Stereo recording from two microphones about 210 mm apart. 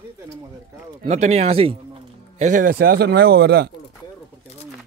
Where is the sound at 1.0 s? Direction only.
30° right (ahead or behind); by 3.6 s 50° right (ahead or behind).